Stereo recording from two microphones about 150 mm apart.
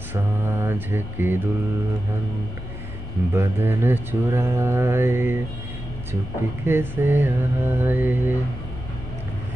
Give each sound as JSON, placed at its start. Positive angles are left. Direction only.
{"t": 0.1, "sound": "mantra", "side_deg": -15}
{"t": 3.3, "sound": "mantra", "side_deg": -15}
{"t": 6.6, "sound": "mantra", "side_deg": -15}